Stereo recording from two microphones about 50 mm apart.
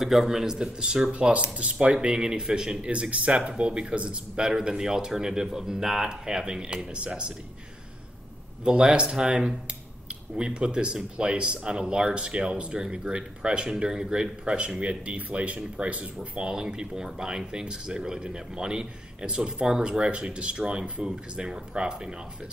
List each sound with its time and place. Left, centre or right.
0.0 s speech: centre
1.1 s speech: right
8.6 s speech: centre